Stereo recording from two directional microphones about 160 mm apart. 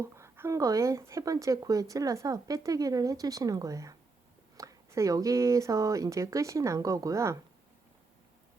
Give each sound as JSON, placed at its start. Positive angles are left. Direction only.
{"t": 0.0, "sound": "speech", "side_deg": -15}